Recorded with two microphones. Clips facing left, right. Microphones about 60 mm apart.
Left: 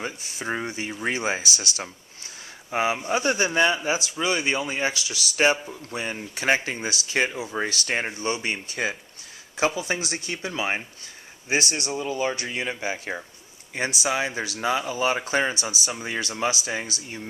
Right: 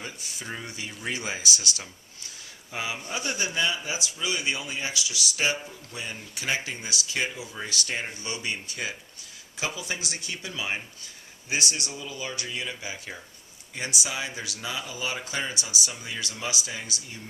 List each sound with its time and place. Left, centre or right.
0.0 s speech: left
7.5 s speech: left
8.1 s speech: left